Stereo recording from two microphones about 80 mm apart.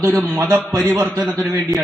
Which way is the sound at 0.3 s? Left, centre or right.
Right.